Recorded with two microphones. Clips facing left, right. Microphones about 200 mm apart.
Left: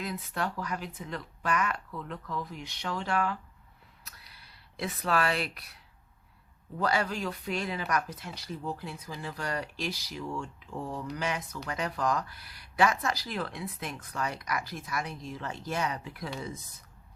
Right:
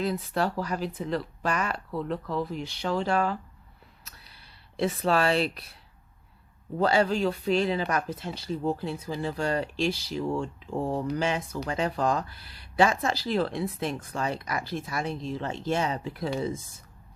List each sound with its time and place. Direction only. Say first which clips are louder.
0.0 s speech: right 7 dB; 35° right (ahead or behind)
4.0 s a sound: left 1 dB; 30° right (ahead or behind)
6.7 s speech: right 6 dB; 30° right (ahead or behind)